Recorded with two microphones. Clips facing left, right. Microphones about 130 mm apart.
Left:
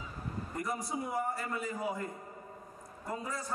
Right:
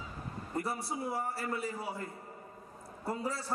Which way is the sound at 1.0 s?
30° right (ahead or behind).